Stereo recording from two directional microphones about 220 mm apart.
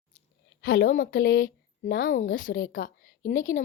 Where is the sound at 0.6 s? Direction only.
55° left (ahead or behind).